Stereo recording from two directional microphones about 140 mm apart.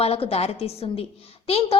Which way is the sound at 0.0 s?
45° left (ahead or behind).